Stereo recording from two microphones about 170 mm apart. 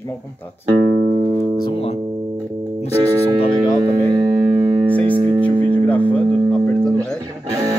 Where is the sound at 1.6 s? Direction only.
35° left (ahead or behind).